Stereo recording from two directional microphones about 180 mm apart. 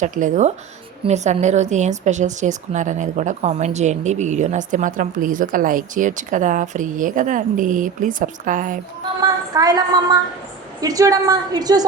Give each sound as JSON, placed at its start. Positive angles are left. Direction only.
{"t": 0.0, "sound": "speech", "side_deg": -45}
{"t": 9.2, "sound": "a woman's voice", "side_deg": -20}